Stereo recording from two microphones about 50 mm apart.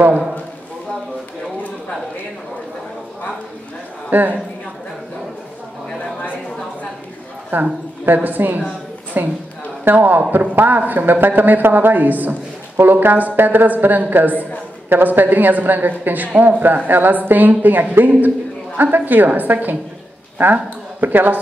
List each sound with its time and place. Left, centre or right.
4.1 s a woman's voice: right
7.5 s a woman's voice: right